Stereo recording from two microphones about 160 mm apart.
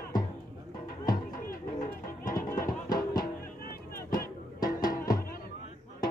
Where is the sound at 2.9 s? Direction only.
25° left (ahead or behind).